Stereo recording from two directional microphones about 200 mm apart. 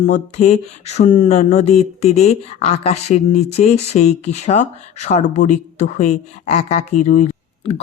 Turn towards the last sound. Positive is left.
turn(degrees=35)  # may be behind; listen again after turning